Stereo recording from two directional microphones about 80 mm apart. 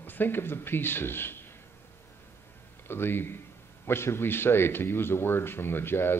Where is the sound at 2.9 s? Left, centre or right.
Left.